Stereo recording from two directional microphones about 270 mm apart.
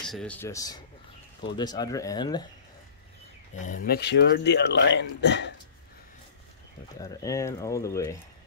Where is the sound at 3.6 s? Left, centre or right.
Left.